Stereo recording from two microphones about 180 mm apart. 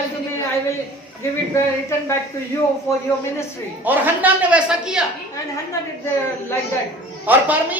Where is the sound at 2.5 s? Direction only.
15° left (ahead or behind).